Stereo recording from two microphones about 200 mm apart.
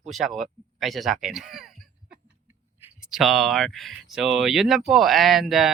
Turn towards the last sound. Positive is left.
turn(degrees=0)  # may be behind; listen again after turning